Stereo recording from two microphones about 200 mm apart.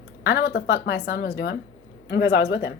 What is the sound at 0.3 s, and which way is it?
A woman's voice, 55° left (ahead or behind).